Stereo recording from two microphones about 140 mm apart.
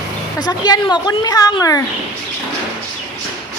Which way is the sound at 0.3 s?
30° left (ahead or behind).